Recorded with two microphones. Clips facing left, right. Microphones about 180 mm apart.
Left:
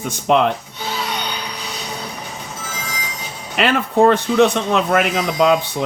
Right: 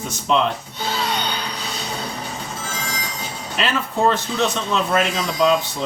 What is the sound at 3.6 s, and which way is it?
Speech, 60° left (ahead or behind).